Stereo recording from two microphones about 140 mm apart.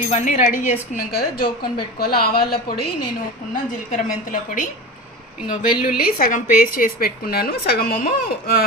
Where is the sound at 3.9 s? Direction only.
70° left (ahead or behind).